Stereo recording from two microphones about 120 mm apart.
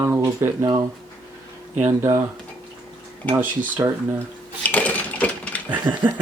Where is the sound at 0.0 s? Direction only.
25° right (ahead or behind).